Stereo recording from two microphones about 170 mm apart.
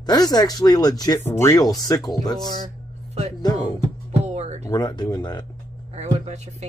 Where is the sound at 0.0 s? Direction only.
25° left (ahead or behind).